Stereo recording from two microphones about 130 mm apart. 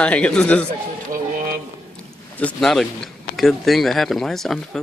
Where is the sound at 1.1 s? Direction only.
90° right.